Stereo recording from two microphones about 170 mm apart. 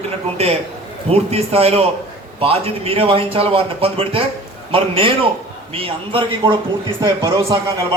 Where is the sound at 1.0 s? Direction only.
35° right (ahead or behind); by 7.5 s 20° right (ahead or behind).